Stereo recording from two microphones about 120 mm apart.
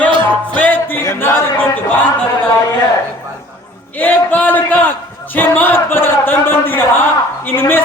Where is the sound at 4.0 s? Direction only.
15° left (ahead or behind).